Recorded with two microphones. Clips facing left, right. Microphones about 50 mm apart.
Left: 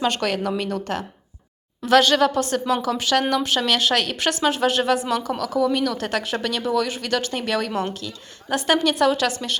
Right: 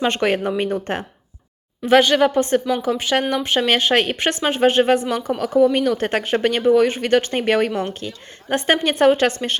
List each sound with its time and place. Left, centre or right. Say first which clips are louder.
0.0 s speech: right 3 dB; right